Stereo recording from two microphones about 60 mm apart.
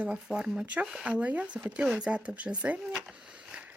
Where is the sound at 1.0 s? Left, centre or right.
Right.